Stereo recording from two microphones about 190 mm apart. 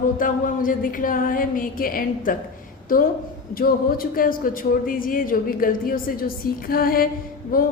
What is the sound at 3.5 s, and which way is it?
A woman's voice, 50° left (ahead or behind).